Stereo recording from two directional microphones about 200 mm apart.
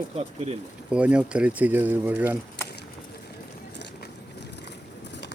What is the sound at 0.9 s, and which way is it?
Speech, 5° right (ahead or behind).